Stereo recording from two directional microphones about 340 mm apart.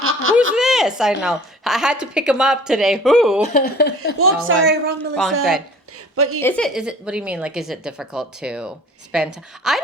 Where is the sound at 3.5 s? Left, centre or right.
Left.